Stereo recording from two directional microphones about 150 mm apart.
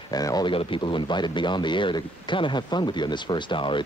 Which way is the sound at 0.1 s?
25° left (ahead or behind).